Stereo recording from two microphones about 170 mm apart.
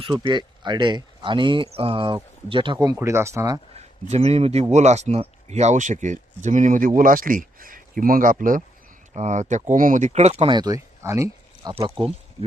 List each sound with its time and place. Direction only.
0.0 s speech: 30° right (ahead or behind)
3.8 s speech: 40° right (ahead or behind); by 11.7 s 20° right (ahead or behind)
11.7 s speech: 35° right (ahead or behind)